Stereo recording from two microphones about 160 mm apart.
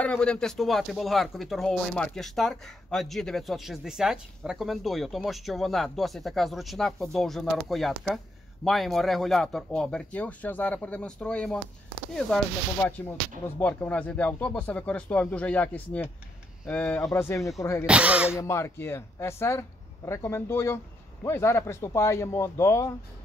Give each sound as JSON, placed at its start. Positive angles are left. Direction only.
{"t": 0.0, "sound": "speech", "side_deg": 5}
{"t": 13.6, "sound": "a man's voice", "side_deg": 10}
{"t": 17.8, "sound": "speech", "side_deg": -5}
{"t": 18.4, "sound": "a man's voice", "side_deg": 15}